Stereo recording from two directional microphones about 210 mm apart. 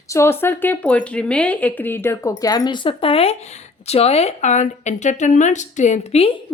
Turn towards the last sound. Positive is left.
turn(degrees=30)  # may be behind; listen again after turning